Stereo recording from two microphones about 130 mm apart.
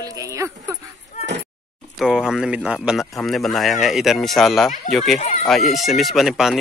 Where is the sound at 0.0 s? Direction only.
25° right (ahead or behind).